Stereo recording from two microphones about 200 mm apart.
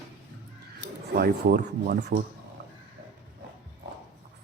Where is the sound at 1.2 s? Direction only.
55° right (ahead or behind).